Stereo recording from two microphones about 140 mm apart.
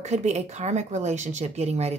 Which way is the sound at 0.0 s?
55° right (ahead or behind).